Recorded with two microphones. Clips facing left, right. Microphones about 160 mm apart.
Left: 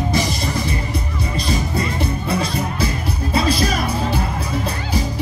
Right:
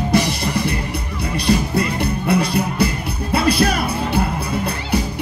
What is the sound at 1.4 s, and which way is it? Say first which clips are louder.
Music: right 6 dB; 70° right (ahead or behind).